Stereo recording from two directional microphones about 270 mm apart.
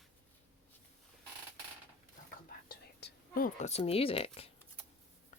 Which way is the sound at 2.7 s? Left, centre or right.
Left.